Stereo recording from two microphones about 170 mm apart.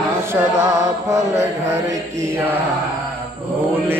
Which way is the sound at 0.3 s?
15° right (ahead or behind).